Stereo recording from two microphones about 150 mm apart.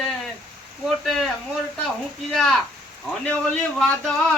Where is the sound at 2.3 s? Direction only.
Centre (ahead or behind).